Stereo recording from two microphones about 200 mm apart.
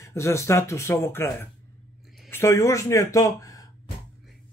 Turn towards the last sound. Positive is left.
turn(degrees=15)  # may be behind; listen again after turning